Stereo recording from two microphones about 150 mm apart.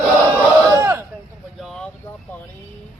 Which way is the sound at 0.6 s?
20° right (ahead or behind).